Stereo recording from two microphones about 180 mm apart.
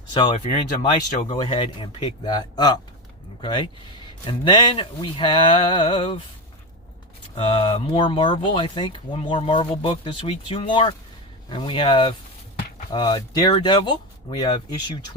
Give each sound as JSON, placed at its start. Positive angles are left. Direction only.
{"t": 0.1, "sound": "speech", "side_deg": 25}
{"t": 7.3, "sound": "speech", "side_deg": 30}